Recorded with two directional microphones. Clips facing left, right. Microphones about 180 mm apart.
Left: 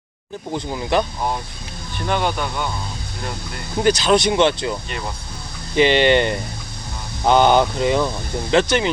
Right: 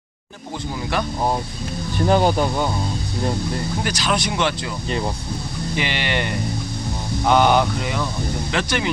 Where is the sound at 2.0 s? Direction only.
35° right (ahead or behind).